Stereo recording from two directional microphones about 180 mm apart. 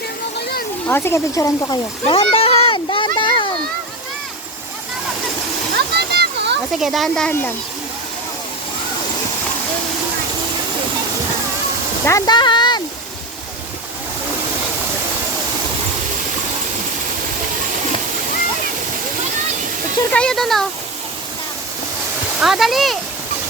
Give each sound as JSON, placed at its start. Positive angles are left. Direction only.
{"t": 0.9, "sound": "speech", "side_deg": 15}
{"t": 2.0, "sound": "a sound", "side_deg": 30}
{"t": 5.7, "sound": "a sound", "side_deg": -65}
{"t": 6.7, "sound": "speech", "side_deg": 0}
{"t": 12.0, "sound": "speech", "side_deg": 20}
{"t": 20.1, "sound": "speech", "side_deg": 5}
{"t": 22.4, "sound": "speech", "side_deg": 0}